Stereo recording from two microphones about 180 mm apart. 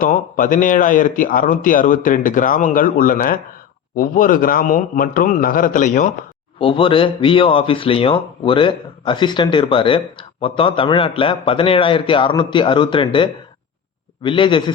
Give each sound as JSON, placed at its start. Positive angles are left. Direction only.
{"t": 0.0, "sound": "speech", "side_deg": 50}
{"t": 6.6, "sound": "speech", "side_deg": 30}